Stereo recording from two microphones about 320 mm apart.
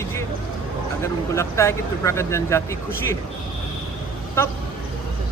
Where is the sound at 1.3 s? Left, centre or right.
Centre.